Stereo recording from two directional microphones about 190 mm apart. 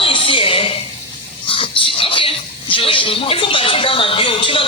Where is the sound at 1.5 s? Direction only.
30° left (ahead or behind).